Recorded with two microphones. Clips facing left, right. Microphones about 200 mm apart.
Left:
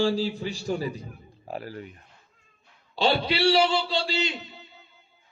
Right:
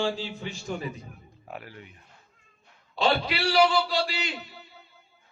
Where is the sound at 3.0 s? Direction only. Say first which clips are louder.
Left 2 dB; 30° left (ahead or behind).